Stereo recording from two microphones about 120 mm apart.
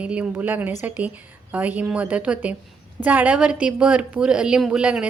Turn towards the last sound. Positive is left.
turn(degrees=-10)  # may be behind; listen again after turning